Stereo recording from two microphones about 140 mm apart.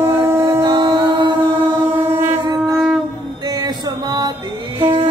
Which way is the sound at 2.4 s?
25° right (ahead or behind).